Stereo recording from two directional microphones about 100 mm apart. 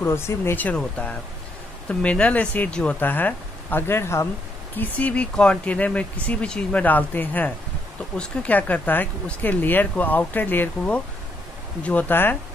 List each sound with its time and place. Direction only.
0.0 s speech: 25° left (ahead or behind)
0.7 s speech: 15° left (ahead or behind)
4.7 s speech: 15° left (ahead or behind)